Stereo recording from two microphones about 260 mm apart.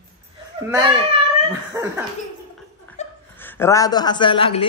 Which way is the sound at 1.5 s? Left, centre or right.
Centre.